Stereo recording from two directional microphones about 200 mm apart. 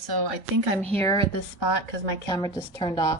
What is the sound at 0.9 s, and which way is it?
Speech, 15° left (ahead or behind).